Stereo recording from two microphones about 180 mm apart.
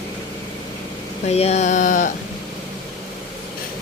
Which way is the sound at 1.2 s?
35° left (ahead or behind).